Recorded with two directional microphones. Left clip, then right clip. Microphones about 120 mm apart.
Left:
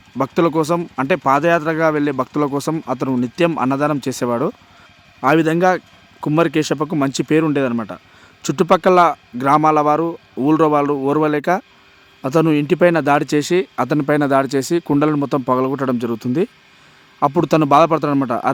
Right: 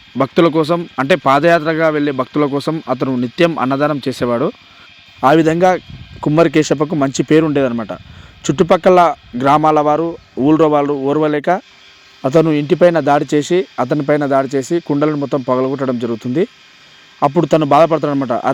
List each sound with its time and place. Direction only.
0.2 s speech: 15° right (ahead or behind)
5.2 s speech: 25° right (ahead or behind); by 18.5 s 5° right (ahead or behind)